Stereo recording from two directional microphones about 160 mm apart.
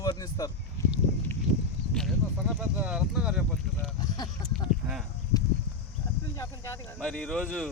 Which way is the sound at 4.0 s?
25° left (ahead or behind).